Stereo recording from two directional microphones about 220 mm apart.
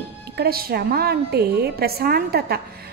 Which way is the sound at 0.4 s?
45° right (ahead or behind).